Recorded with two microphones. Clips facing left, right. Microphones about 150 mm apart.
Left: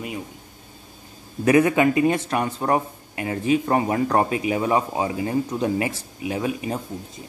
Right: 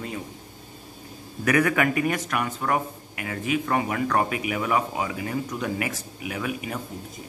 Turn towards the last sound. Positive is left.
turn(degrees=30)  # may be behind; listen again after turning